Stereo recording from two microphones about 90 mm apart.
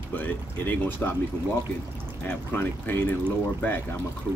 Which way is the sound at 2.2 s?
20° left (ahead or behind).